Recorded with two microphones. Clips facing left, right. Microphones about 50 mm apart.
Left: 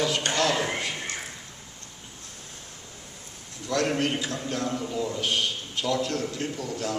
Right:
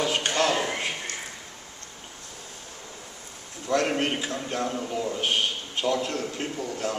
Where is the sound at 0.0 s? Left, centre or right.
Right.